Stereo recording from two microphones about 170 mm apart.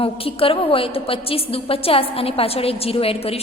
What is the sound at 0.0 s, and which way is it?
A woman's voice, 35° left (ahead or behind).